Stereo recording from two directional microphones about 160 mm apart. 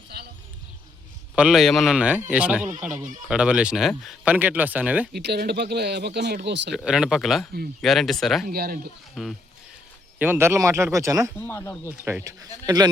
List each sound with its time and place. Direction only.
1.4 s a man's voice: 5° right (ahead or behind)
5.1 s speech: 90° right
6.7 s a man's voice: 5° right (ahead or behind)
8.4 s speech: 70° right (ahead or behind)
9.2 s a man's voice: centre (ahead or behind)
10.2 s speech: 15° right (ahead or behind)
11.3 s speech: 15° left (ahead or behind)
12.0 s speech: 15° right (ahead or behind)